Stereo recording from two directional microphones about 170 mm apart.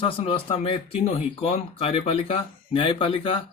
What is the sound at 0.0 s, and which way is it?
Speech, 30° left (ahead or behind).